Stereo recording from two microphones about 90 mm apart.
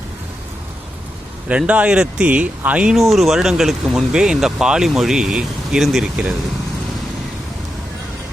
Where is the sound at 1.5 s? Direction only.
15° right (ahead or behind).